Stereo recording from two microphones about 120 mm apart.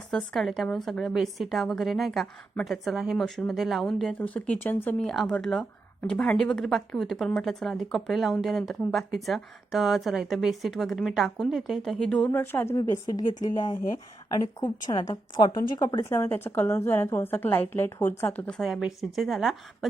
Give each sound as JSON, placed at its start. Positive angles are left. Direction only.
{"t": 0.1, "sound": "speech", "side_deg": 5}
{"t": 4.2, "sound": "speech", "side_deg": 15}
{"t": 12.7, "sound": "a woman's voice", "side_deg": 30}
{"t": 18.6, "sound": "speech", "side_deg": -5}